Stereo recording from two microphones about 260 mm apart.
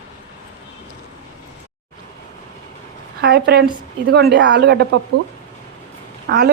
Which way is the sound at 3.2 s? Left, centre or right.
Right.